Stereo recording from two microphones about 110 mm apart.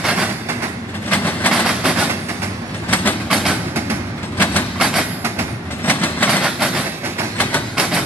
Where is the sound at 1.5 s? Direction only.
5° right (ahead or behind).